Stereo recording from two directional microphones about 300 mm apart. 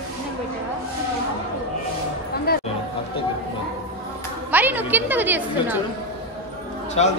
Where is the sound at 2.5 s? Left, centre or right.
Left.